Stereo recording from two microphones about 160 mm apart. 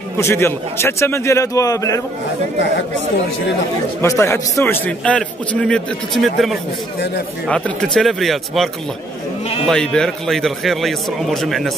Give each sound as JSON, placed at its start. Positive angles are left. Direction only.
{"t": 0.2, "sound": "a man's voice", "side_deg": 15}
{"t": 4.0, "sound": "a man's voice", "side_deg": 20}
{"t": 9.7, "sound": "a man's voice", "side_deg": 5}